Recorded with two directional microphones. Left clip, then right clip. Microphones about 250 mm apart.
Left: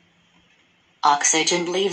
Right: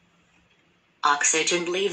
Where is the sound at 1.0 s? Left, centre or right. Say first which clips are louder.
Left 4 dB; left.